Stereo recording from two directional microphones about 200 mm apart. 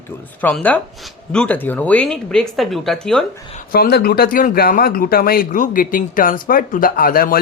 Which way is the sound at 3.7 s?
50° left (ahead or behind).